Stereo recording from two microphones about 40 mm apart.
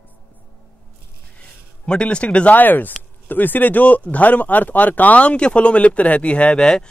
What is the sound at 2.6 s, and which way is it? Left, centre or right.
Speech, left.